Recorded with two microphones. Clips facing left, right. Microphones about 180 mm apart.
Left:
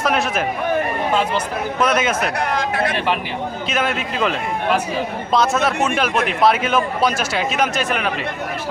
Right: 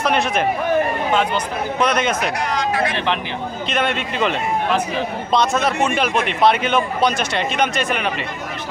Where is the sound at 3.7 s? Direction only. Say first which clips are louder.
Right 1 dB; 5° left (ahead or behind).